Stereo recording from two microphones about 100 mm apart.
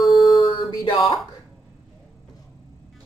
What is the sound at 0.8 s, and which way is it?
Speech, 40° left (ahead or behind).